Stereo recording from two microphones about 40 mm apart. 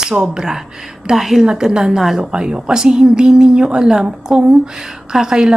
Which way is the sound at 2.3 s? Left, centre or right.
Right.